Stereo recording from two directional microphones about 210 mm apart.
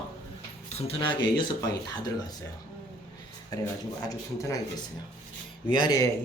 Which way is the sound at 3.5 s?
20° left (ahead or behind).